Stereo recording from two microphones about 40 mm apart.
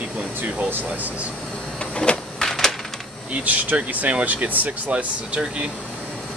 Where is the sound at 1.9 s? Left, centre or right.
Left.